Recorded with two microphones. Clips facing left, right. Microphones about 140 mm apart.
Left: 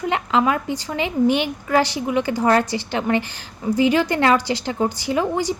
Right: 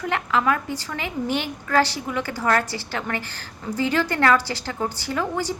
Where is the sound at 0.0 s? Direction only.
20° left (ahead or behind).